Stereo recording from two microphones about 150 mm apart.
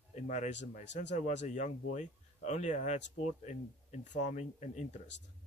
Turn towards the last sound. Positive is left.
turn(degrees=50)  # may be behind; listen again after turning